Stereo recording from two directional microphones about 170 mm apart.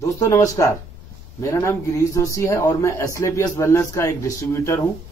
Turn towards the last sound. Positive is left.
turn(degrees=15)  # may be behind; listen again after turning